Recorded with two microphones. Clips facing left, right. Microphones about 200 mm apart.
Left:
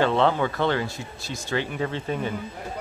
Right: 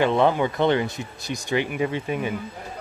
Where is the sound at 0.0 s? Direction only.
15° right (ahead or behind).